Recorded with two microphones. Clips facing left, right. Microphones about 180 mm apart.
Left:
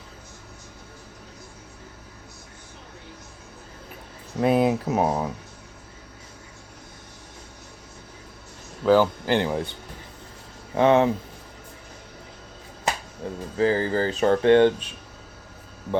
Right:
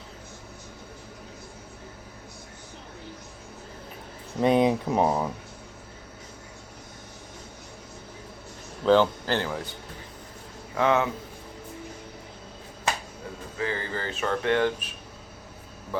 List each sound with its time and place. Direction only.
4.4 s speech: 5° left (ahead or behind)
8.8 s speech: 5° left (ahead or behind)
10.8 s speech: 30° left (ahead or behind)
13.2 s a sound: 30° left (ahead or behind)
13.6 s speech: 35° left (ahead or behind)